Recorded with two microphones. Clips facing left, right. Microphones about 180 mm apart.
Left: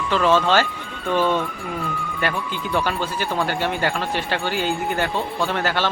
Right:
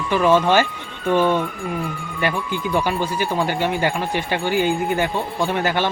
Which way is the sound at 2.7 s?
15° right (ahead or behind).